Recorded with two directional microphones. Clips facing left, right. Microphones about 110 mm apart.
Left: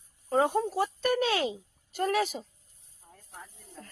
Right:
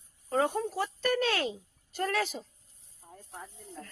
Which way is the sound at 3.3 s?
25° right (ahead or behind).